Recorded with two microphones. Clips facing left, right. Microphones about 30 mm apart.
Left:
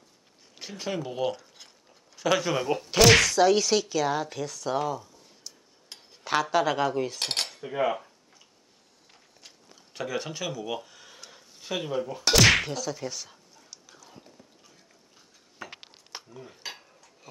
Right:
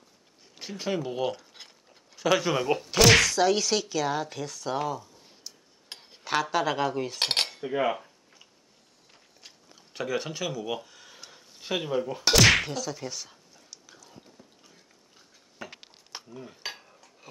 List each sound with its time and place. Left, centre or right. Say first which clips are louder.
0.6 s speech: right 2 dB; centre
1.9 s zipper: right 1 dB; centre
2.9 s speech: left 1 dB; centre
5.9 s cutlery: right 3 dB; centre
6.2 s speech: left 2 dB; centre
7.2 s cutlery: right 3 dB; right
7.4 s cutlery: even; centre
9.9 s a sound: right 1 dB; centre
11.6 s speech: right 2 dB; centre
12.4 s whip: even; centre
14.6 s a sound: even; centre
15.7 s cutlery: left 1 dB; centre
16.7 s dishes: right 1 dB; centre